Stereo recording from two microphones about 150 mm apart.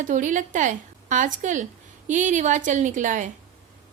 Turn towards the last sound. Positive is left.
turn(degrees=-55)  # may be behind; listen again after turning